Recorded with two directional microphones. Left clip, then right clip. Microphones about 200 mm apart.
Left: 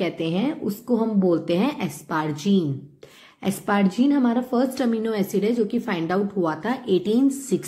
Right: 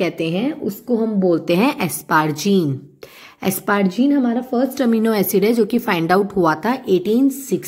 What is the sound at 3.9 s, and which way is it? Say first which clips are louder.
A woman's voice: right 3 dB; 15° right (ahead or behind).